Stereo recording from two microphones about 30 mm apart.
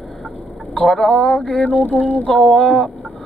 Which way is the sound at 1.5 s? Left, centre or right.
Left.